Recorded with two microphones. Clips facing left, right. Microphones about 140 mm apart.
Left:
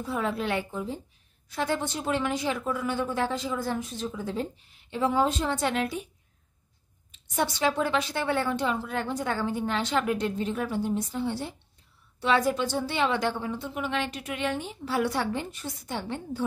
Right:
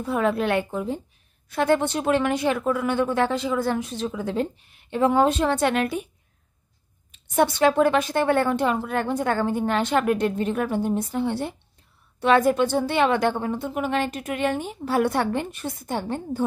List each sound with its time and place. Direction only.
0.0 s speech: 60° right (ahead or behind)
7.1 s a woman's voice: 55° right (ahead or behind)